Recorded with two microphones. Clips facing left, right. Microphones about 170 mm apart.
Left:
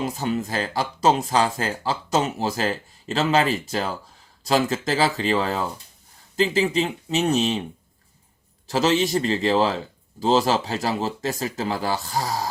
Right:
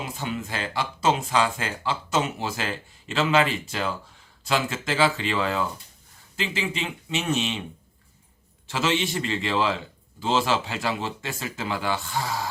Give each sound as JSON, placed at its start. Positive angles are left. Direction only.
{"t": 0.0, "sound": "speech", "side_deg": 40}
{"t": 8.6, "sound": "speech", "side_deg": 40}